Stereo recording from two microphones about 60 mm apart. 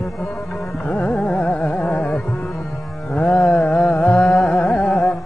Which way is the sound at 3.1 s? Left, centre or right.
Left.